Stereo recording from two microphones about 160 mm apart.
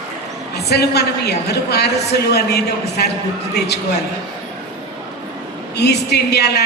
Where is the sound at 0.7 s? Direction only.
90° left.